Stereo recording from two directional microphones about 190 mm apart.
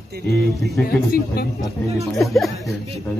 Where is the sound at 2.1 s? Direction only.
Centre (ahead or behind).